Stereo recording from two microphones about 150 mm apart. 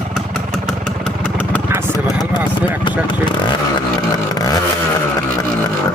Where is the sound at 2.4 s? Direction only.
10° right (ahead or behind).